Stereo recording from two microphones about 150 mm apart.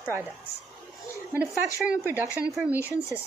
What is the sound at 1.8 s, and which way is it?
Speech, centre (ahead or behind).